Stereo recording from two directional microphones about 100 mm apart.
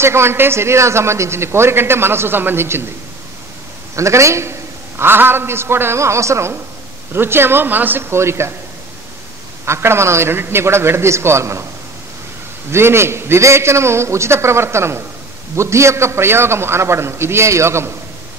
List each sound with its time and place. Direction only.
0.0 s a man's voice: 25° right (ahead or behind)
3.9 s a man's voice: 30° right (ahead or behind)
9.7 s a man's voice: 25° right (ahead or behind)
12.7 s a man's voice: 25° right (ahead or behind)